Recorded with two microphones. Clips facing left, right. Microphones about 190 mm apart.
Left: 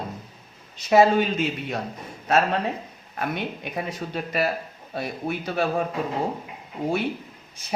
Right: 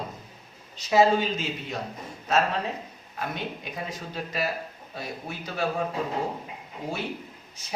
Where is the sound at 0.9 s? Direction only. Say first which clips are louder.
Left 3 dB; 60° left (ahead or behind).